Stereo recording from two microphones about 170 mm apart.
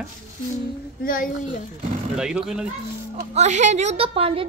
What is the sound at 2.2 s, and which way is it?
Speech, 5° right (ahead or behind).